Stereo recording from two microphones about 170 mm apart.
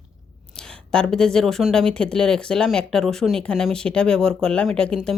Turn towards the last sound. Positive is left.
turn(degrees=5)  # may be behind; listen again after turning